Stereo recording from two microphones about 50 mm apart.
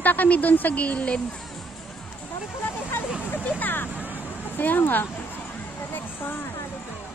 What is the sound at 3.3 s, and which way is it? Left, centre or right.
Speech, left.